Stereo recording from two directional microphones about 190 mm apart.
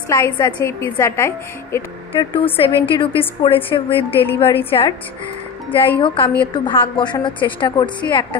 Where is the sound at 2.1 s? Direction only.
30° left (ahead or behind).